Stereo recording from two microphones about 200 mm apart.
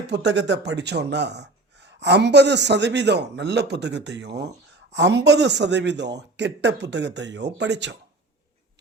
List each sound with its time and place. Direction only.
0.1 s speech: 60° right (ahead or behind)